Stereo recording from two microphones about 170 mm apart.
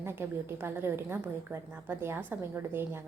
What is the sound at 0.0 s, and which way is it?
A woman's voice, 15° right (ahead or behind).